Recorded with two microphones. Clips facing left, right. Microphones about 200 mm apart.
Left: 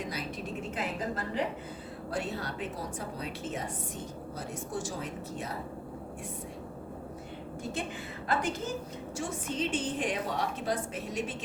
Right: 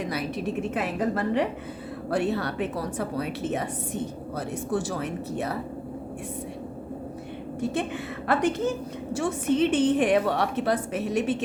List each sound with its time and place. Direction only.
0.1 s a woman's voice: 65° right (ahead or behind)
8.3 s a woman's voice: 65° right (ahead or behind)